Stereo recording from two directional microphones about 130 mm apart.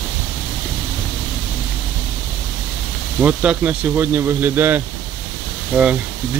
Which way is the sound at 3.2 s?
10° right (ahead or behind).